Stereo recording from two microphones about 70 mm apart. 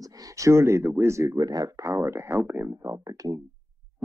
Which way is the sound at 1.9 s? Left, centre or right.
Right.